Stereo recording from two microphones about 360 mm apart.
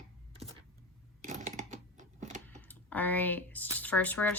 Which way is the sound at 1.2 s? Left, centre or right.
Right.